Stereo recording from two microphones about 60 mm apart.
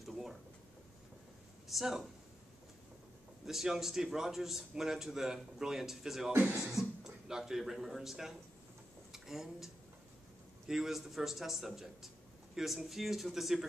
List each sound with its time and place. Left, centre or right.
0.0 s a sound: centre
1.7 s a man's voice: centre
3.4 s a man's voice: centre
6.3 s speech: right
6.6 s speech: centre
10.7 s a man's voice: centre